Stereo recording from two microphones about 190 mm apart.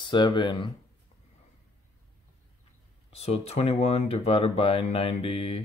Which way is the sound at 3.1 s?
35° left (ahead or behind).